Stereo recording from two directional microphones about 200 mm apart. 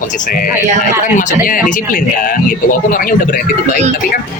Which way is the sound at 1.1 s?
40° left (ahead or behind).